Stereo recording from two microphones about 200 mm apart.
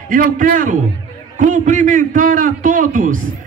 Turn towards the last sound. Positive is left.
turn(degrees=-40)  # may be behind; listen again after turning